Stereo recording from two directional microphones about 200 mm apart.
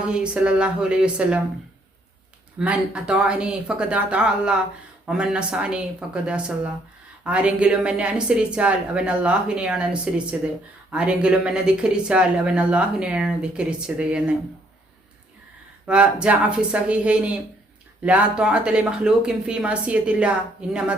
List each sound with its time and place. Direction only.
0.0 s speech: 5° right (ahead or behind)
2.6 s speech: 5° right (ahead or behind)
7.3 s speech: 5° right (ahead or behind)
15.9 s speech: 5° right (ahead or behind)